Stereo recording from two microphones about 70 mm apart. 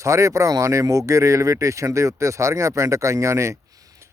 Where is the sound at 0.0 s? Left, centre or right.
Right.